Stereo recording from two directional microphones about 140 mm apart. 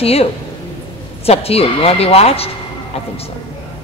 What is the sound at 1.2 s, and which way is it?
A man's voice, 45° left (ahead or behind).